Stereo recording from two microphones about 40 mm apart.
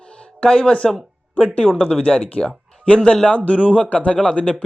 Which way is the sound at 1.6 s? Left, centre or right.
Centre.